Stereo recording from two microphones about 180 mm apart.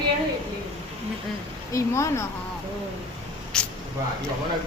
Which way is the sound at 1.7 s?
15° left (ahead or behind).